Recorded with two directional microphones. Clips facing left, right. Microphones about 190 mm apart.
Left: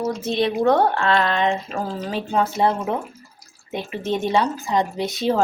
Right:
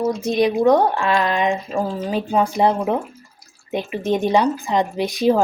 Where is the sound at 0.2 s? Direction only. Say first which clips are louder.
Right 3 dB; 15° right (ahead or behind).